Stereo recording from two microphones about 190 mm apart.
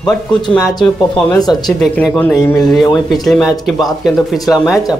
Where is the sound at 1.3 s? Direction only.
20° left (ahead or behind).